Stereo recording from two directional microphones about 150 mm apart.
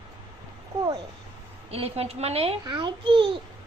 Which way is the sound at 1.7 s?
40° right (ahead or behind).